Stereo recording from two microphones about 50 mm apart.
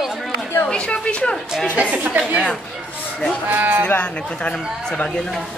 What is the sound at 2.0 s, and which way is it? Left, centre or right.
Speech, right.